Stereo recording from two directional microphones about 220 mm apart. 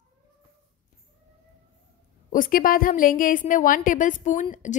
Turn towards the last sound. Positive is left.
turn(degrees=35)  # may be behind; listen again after turning